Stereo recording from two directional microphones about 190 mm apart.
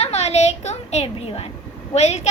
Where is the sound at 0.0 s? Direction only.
35° left (ahead or behind).